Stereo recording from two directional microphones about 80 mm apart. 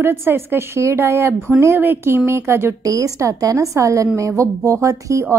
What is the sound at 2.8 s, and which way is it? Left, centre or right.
A woman's voice, right.